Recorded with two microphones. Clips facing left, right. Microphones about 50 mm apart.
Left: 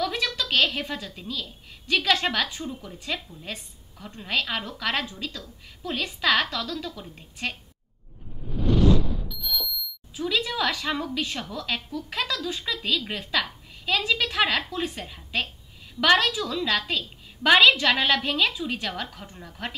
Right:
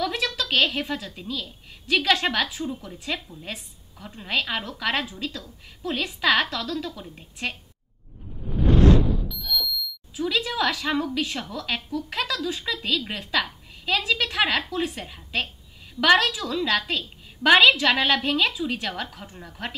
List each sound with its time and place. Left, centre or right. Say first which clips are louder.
0.0 s a woman's voice: right 1 dB; centre
8.6 s a sound: right 3 dB; right
10.1 s a woman's voice: right 1 dB; centre